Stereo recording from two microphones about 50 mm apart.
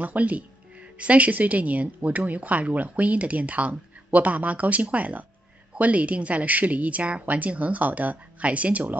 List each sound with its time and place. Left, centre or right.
0.0 s speech: right